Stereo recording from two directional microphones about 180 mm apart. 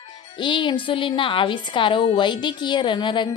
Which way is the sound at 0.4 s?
25° left (ahead or behind).